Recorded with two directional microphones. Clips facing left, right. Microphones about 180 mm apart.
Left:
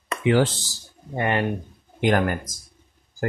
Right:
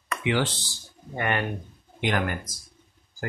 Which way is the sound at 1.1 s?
30° left (ahead or behind).